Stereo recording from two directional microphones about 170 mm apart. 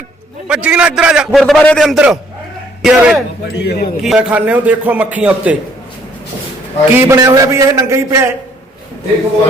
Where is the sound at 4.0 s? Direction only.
5° right (ahead or behind).